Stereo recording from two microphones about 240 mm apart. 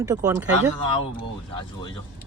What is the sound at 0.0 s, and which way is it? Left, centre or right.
Speech, centre.